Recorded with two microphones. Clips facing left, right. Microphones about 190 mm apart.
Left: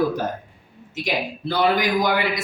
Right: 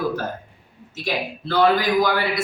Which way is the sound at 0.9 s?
15° left (ahead or behind).